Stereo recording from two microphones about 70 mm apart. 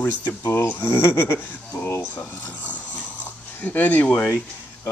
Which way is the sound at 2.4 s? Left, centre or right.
Left.